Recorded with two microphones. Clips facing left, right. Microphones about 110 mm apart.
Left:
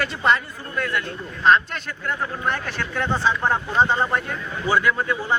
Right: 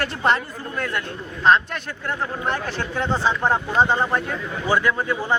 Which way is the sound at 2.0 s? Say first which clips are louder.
Even; 35° right (ahead or behind).